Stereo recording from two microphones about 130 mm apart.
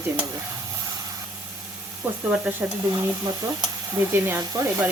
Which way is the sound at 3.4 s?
25° right (ahead or behind).